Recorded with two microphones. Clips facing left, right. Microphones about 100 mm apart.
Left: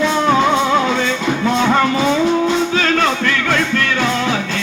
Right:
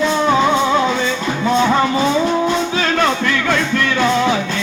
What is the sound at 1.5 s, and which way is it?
Music, 5° right (ahead or behind).